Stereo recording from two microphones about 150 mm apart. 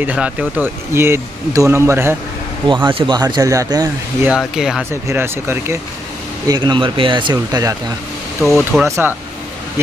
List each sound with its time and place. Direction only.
0.0 s speech: 10° right (ahead or behind)
2.7 s speech: 35° right (ahead or behind)
4.3 s speech: 5° right (ahead or behind)
5.0 s speech: 15° right (ahead or behind)
6.4 s speech: 30° right (ahead or behind)
8.4 s speech: centre (ahead or behind)
8.8 s speech: 20° right (ahead or behind)